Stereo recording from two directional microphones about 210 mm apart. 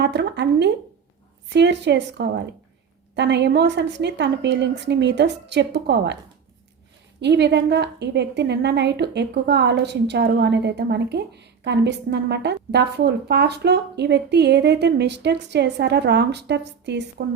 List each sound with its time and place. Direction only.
0.0 s a woman's voice: 55° right (ahead or behind)
7.2 s a woman's voice: 55° right (ahead or behind)